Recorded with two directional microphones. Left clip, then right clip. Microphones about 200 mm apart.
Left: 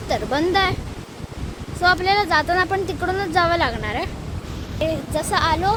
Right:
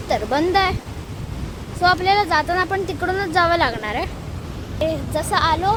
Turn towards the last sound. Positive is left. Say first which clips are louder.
# right 1 dB
turn(degrees=5)  # may be behind; listen again after turning